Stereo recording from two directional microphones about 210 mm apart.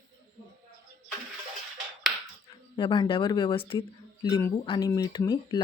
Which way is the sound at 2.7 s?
20° left (ahead or behind).